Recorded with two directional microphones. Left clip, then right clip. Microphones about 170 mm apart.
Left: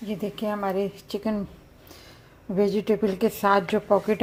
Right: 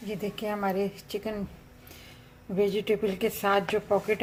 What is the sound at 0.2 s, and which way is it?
A woman's voice, 25° left (ahead or behind).